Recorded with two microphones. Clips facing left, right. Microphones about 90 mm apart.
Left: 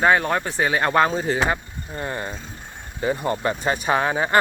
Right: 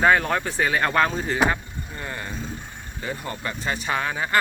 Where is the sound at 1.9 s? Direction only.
30° left (ahead or behind).